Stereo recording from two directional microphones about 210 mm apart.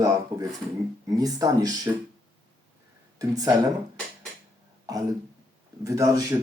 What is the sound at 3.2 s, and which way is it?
Speech, 15° right (ahead or behind).